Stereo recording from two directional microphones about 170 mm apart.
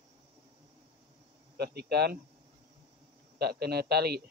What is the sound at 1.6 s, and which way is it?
Speech, 70° right (ahead or behind).